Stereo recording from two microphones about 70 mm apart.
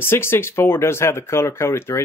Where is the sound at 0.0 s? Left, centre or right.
Left.